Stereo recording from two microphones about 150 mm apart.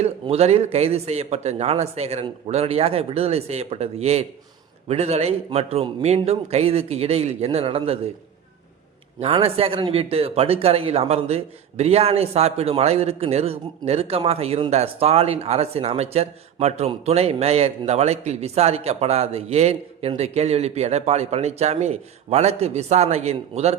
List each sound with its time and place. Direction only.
0.0 s speech: 45° right (ahead or behind)
9.2 s speech: 40° right (ahead or behind)